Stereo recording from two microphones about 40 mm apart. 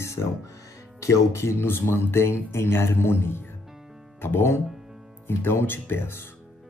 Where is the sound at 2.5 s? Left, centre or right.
Left.